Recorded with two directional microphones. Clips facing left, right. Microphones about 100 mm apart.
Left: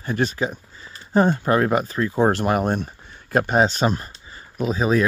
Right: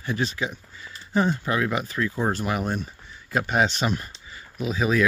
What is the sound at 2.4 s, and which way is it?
Speech, 50° left (ahead or behind).